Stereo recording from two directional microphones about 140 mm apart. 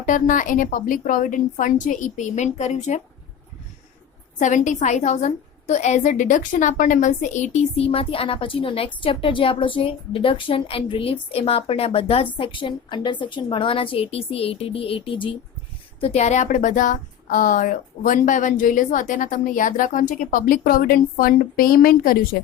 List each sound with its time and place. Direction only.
0.0 s speech: 70° left (ahead or behind); by 3.0 s 55° left (ahead or behind)
4.4 s a woman's voice: 60° left (ahead or behind); by 22.4 s 90° left